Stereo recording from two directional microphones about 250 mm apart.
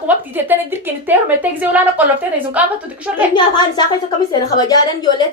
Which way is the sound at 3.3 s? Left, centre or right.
Centre.